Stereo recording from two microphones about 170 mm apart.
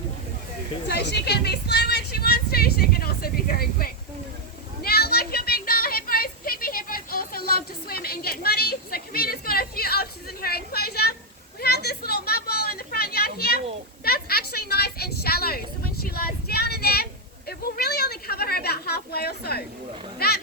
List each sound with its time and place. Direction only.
0.9 s speech: 70° left (ahead or behind)
4.8 s a sound: 65° left (ahead or behind)
20.1 s speech: 65° left (ahead or behind)